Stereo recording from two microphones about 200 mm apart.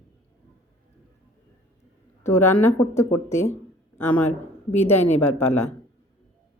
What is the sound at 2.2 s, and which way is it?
Speech, 10° left (ahead or behind).